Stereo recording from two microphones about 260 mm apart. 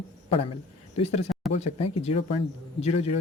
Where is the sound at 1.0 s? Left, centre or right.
Left.